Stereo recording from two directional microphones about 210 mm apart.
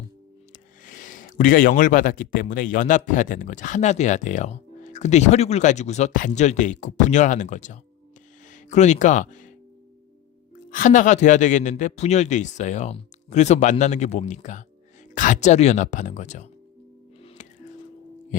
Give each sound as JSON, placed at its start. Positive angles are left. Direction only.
{"t": 0.9, "sound": "speech", "side_deg": 40}
{"t": 10.7, "sound": "speech", "side_deg": 40}